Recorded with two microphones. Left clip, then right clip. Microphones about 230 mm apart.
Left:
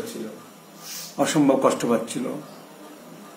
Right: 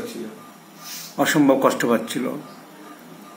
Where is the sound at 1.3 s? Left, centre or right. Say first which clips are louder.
Right 2 dB; centre.